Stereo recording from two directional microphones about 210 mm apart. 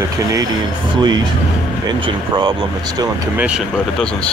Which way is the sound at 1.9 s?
20° right (ahead or behind).